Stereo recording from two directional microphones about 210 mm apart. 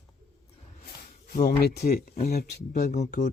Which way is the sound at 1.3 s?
45° left (ahead or behind).